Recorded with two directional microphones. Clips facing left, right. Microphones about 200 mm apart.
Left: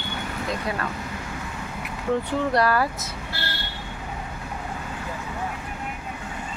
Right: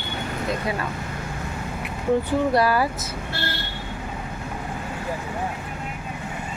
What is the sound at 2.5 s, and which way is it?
Speech, 5° right (ahead or behind).